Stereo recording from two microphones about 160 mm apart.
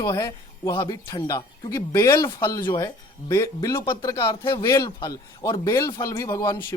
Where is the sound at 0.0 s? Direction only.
25° left (ahead or behind).